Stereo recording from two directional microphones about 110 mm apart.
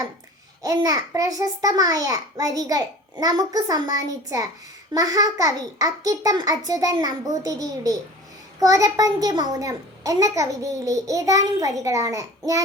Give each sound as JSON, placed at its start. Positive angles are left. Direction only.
{"t": 0.6, "sound": "a child's voice", "side_deg": -35}